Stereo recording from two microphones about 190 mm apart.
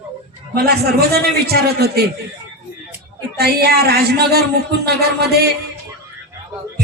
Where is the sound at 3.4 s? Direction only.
55° right (ahead or behind).